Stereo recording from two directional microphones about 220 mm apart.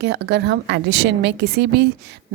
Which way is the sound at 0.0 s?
50° right (ahead or behind).